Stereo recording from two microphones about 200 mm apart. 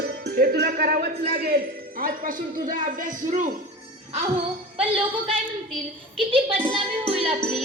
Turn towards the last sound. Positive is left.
turn(degrees=-25)  # may be behind; listen again after turning